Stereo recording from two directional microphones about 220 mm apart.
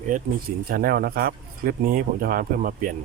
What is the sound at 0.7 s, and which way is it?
Speech, 40° right (ahead or behind).